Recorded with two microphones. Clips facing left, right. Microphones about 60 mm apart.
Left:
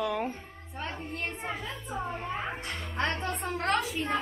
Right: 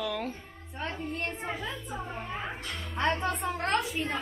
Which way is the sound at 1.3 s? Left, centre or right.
Centre.